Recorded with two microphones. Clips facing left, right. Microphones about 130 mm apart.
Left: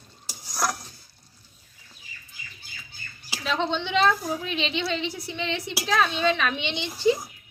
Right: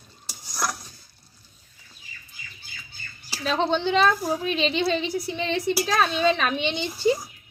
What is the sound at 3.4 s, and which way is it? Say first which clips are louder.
A woman's voice: right 4 dB; 40° right (ahead or behind).